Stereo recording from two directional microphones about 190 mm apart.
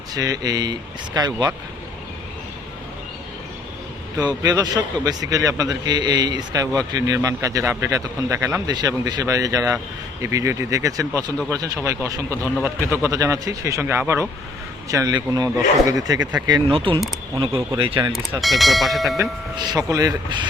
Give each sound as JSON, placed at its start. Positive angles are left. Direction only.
{"t": 0.1, "sound": "a man's voice", "side_deg": -20}
{"t": 4.2, "sound": "a man's voice", "side_deg": -20}
{"t": 12.3, "sound": "a man's voice", "side_deg": 10}
{"t": 12.6, "sound": "a man's voice", "side_deg": -15}
{"t": 17.3, "sound": "a man's voice", "side_deg": -20}
{"t": 18.1, "sound": "speech", "side_deg": 0}
{"t": 19.2, "sound": "a man's voice", "side_deg": -20}